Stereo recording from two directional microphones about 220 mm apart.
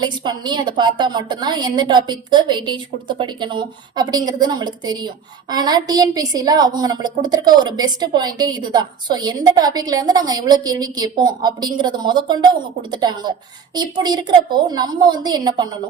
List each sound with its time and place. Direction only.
0.0 s a woman's voice: 20° right (ahead or behind)